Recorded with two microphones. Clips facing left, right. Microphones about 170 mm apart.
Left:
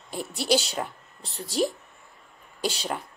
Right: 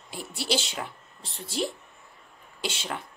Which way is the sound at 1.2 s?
Centre (ahead or behind).